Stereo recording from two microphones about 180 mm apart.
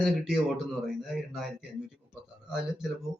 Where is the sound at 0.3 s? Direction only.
5° right (ahead or behind).